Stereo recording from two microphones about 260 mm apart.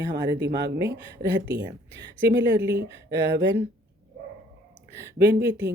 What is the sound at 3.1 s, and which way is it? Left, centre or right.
Speech, right.